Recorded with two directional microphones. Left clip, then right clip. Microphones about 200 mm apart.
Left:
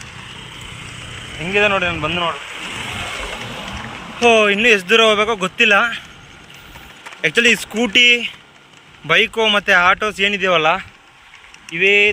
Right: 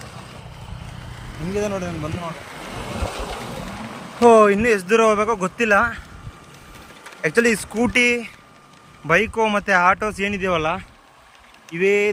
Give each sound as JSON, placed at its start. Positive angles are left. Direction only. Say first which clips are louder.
{"t": 1.5, "sound": "a man's voice", "louder": "left 9 dB", "side_deg": 30}
{"t": 4.3, "sound": "speech", "louder": "left 1 dB", "side_deg": -25}
{"t": 7.2, "sound": "speech", "louder": "left 4 dB", "side_deg": -20}